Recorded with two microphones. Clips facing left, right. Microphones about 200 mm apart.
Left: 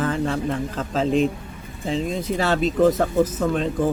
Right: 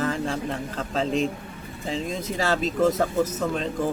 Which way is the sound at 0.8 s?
5° left (ahead or behind).